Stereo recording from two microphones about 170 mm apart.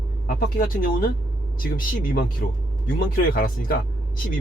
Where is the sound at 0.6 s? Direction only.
55° left (ahead or behind).